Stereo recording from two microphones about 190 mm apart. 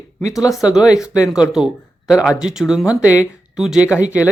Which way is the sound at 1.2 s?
5° right (ahead or behind).